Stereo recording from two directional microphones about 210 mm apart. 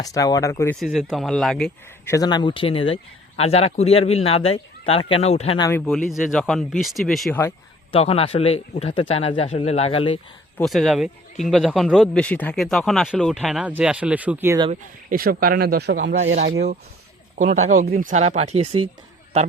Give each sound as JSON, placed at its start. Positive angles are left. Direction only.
{"t": 0.0, "sound": "speech", "side_deg": 15}
{"t": 0.8, "sound": "a man's voice", "side_deg": 0}
{"t": 2.1, "sound": "speech", "side_deg": 20}
{"t": 6.1, "sound": "a man's voice", "side_deg": 0}
{"t": 7.9, "sound": "speech", "side_deg": 25}
{"t": 10.6, "sound": "a man's voice", "side_deg": 0}
{"t": 14.7, "sound": "speech", "side_deg": -45}
{"t": 17.3, "sound": "speech", "side_deg": -35}